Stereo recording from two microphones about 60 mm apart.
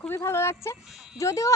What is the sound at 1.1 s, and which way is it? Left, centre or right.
Speech, left.